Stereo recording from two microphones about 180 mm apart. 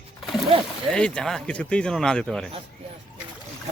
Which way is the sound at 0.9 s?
5° left (ahead or behind).